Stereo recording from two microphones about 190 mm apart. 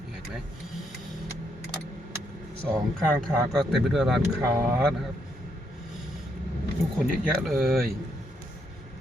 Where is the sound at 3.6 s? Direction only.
Centre (ahead or behind).